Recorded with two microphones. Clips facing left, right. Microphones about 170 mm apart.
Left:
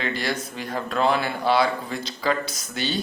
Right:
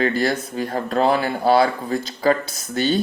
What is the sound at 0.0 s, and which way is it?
Speech, 45° right (ahead or behind).